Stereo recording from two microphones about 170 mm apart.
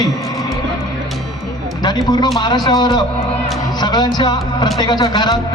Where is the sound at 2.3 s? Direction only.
25° left (ahead or behind).